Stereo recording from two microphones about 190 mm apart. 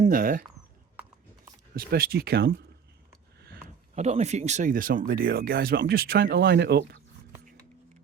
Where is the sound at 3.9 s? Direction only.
35° right (ahead or behind); by 7.0 s 60° right (ahead or behind).